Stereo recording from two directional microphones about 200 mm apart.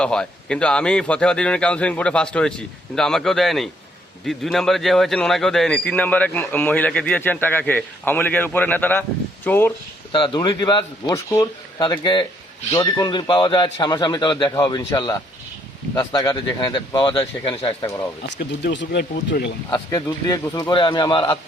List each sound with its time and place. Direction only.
0.0 s a man's voice: 5° left (ahead or behind)
10.1 s a man's voice: 25° left (ahead or behind)
18.2 s speech: 55° left (ahead or behind)
19.7 s a man's voice: 20° left (ahead or behind)